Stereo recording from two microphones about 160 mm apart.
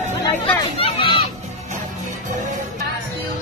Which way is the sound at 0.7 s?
35° left (ahead or behind).